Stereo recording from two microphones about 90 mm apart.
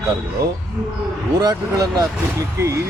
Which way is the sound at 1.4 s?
45° right (ahead or behind).